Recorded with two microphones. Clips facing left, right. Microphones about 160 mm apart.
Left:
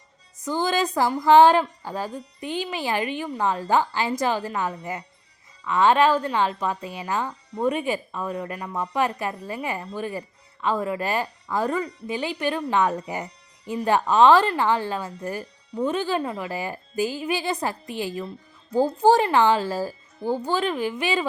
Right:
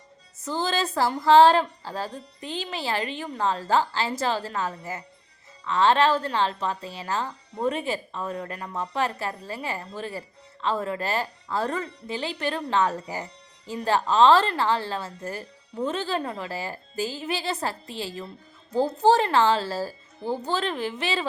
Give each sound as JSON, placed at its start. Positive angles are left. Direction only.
{"t": 0.4, "sound": "a woman's voice", "side_deg": 15}